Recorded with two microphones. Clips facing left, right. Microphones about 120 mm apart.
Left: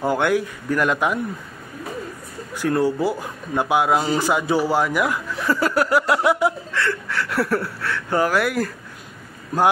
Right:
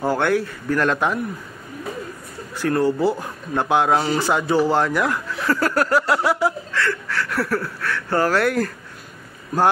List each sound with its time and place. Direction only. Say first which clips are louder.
0.0 s speech: even; 15° left (ahead or behind)
2.5 s speech: even; 10° left (ahead or behind)